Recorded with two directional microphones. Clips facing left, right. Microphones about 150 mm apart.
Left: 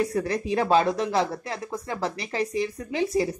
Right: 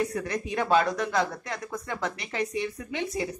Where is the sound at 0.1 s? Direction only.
35° left (ahead or behind).